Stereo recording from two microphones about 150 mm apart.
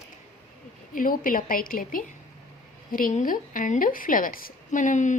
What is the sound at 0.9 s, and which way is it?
A woman's voice, 65° left (ahead or behind).